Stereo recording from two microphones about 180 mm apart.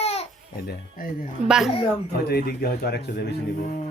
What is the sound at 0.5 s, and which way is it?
Speech, 55° left (ahead or behind).